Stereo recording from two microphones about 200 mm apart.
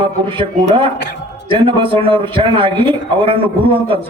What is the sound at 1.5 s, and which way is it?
A man's voice, 25° right (ahead or behind).